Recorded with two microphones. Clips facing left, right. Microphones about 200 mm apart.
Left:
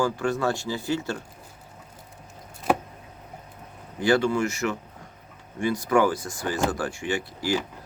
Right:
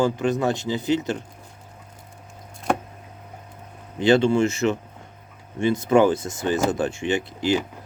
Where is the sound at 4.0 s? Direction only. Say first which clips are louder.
Right 4 dB; 25° right (ahead or behind).